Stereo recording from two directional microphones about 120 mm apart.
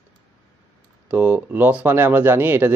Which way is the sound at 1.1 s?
15° right (ahead or behind).